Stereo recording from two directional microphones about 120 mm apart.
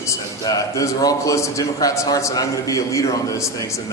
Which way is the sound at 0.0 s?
30° left (ahead or behind).